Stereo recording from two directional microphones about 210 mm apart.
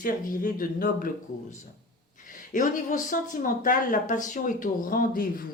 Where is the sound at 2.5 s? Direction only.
40° left (ahead or behind).